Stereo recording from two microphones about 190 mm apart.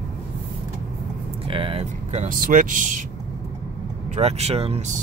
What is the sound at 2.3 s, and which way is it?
Speech, 45° right (ahead or behind).